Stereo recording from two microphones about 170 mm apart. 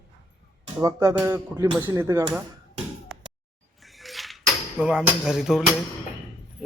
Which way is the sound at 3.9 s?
Centre (ahead or behind).